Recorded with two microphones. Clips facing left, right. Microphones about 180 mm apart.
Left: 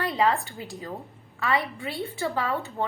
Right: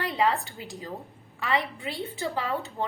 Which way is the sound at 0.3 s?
15° right (ahead or behind).